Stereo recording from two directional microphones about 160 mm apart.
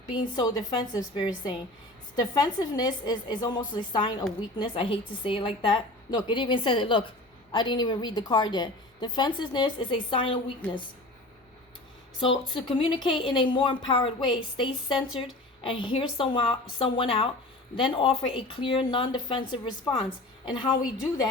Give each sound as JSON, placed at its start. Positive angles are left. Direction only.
{"t": 0.1, "sound": "a woman's voice", "side_deg": 30}
{"t": 10.6, "sound": "a woman's voice", "side_deg": 10}
{"t": 12.6, "sound": "a woman's voice", "side_deg": 30}